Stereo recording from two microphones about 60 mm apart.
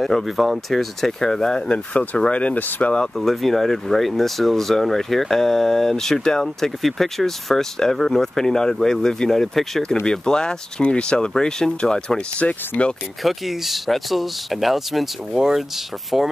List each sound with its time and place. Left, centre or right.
0.0 s speech: centre
2.1 s speech: centre
3.2 s speech: centre; by 12.9 s left
13.2 s speech: centre